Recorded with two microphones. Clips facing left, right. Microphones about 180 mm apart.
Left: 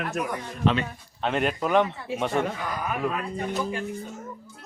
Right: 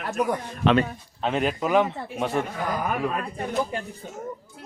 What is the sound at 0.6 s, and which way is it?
Speech, 70° right (ahead or behind).